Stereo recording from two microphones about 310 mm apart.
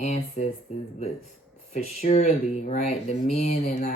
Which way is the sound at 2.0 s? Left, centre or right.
Left.